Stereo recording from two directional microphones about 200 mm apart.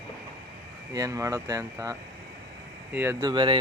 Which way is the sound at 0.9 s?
15° right (ahead or behind).